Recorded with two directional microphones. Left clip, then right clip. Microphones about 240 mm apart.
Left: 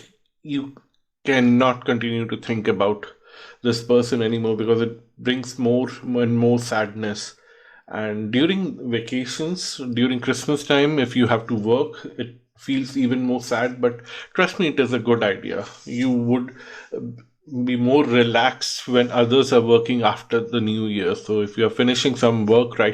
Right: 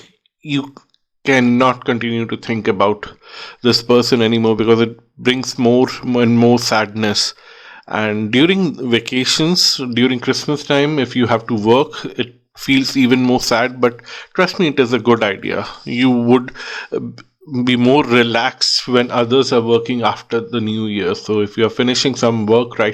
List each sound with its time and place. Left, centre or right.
1.2 s speech: right
14.1 s speech: centre